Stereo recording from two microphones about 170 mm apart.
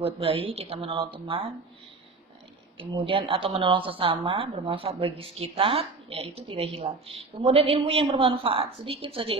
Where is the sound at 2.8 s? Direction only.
30° right (ahead or behind).